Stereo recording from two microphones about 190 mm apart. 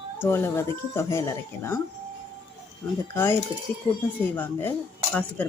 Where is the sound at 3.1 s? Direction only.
10° left (ahead or behind).